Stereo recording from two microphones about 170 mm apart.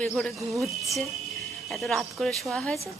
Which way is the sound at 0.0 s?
5° left (ahead or behind).